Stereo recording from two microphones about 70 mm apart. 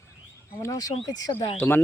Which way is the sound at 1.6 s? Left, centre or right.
Left.